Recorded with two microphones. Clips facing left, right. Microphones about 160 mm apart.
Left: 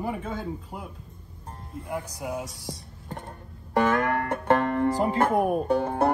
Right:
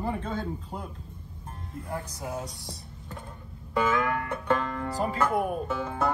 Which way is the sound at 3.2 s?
65° left (ahead or behind).